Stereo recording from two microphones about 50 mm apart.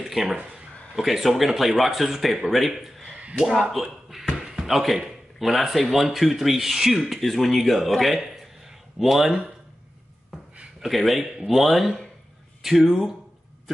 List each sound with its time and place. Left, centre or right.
0.0 s a sound: centre
0.5 s a man's voice: centre
3.2 s slap: right
4.4 s speech: centre
10.8 s speech: centre